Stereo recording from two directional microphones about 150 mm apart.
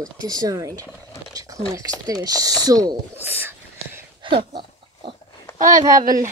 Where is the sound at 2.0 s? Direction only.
25° right (ahead or behind).